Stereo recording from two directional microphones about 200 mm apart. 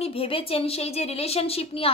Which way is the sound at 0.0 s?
30° left (ahead or behind).